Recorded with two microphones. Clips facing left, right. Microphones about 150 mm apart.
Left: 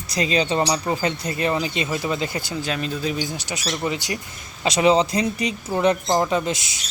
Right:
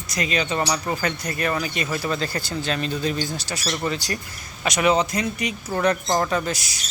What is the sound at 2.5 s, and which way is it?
Speech, 5° left (ahead or behind).